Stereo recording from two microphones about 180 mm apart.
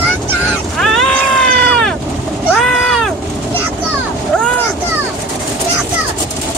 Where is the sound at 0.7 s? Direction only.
Centre (ahead or behind).